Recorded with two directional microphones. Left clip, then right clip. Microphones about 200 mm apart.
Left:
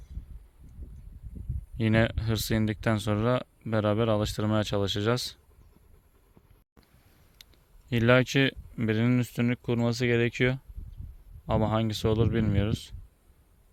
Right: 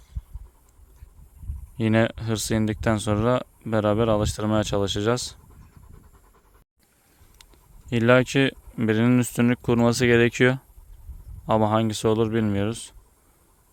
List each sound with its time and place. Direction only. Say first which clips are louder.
1.8 s speech: right 4 dB; 10° right (ahead or behind)
7.9 s speech: right 4 dB; 10° right (ahead or behind)